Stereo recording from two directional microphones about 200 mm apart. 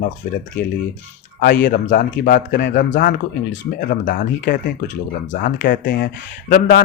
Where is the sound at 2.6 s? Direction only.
60° left (ahead or behind).